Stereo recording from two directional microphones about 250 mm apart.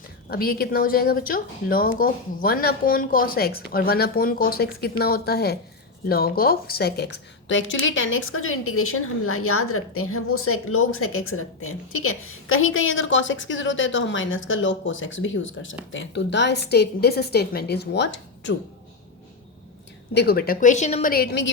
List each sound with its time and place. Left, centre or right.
0.3 s a woman's voice: left
20.1 s a woman's voice: left